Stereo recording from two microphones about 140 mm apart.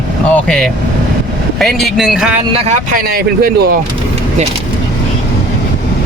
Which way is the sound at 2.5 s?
45° right (ahead or behind).